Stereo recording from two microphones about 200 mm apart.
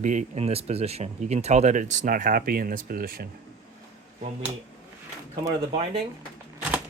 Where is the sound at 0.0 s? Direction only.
40° right (ahead or behind).